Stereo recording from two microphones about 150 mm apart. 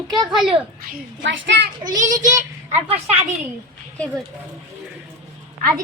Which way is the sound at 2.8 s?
40° right (ahead or behind).